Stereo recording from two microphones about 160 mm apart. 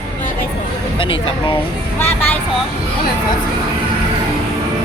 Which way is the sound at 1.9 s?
10° left (ahead or behind).